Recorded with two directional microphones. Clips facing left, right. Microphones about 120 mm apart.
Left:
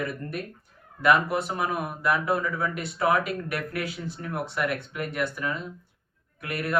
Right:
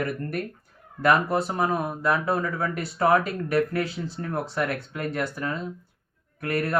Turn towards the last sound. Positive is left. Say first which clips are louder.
# right 4 dB
turn(degrees=-35)  # may be behind; listen again after turning